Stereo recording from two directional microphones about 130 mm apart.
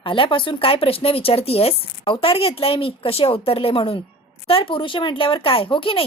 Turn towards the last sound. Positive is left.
turn(degrees=45)  # may be behind; listen again after turning